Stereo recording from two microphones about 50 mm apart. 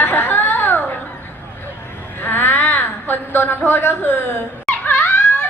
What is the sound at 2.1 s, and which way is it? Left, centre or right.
A woman's voice, left.